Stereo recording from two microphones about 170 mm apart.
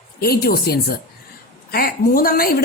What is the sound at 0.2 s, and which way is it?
A woman's voice, 65° left (ahead or behind).